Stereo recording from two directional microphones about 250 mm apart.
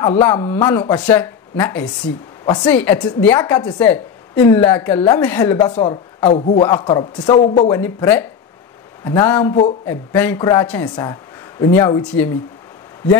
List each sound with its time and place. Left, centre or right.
0.0 s speech: centre
7.8 s speech: centre